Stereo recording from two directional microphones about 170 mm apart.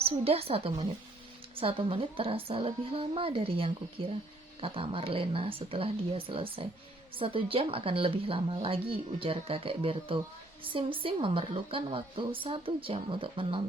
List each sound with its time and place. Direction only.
0.0 s a woman's voice: 35° right (ahead or behind)